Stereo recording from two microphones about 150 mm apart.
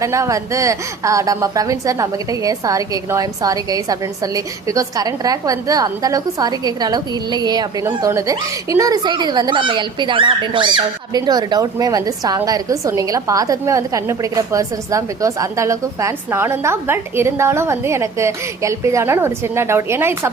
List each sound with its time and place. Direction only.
0.0 s speech: 20° right (ahead or behind)